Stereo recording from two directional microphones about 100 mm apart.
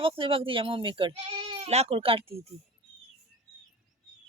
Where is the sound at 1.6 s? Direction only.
90° right.